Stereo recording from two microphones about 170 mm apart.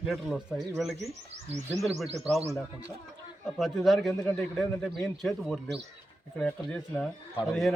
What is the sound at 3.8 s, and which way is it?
A man's voice, centre (ahead or behind).